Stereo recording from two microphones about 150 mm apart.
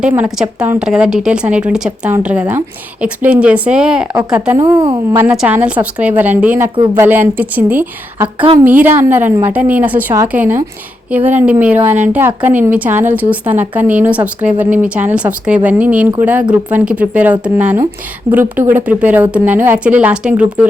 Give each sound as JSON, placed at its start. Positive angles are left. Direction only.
{"t": 0.2, "sound": "speech", "side_deg": -10}
{"t": 4.5, "sound": "a woman's voice", "side_deg": -25}
{"t": 5.1, "sound": "speech", "side_deg": -10}